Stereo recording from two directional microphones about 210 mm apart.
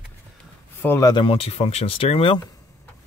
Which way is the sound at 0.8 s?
15° left (ahead or behind).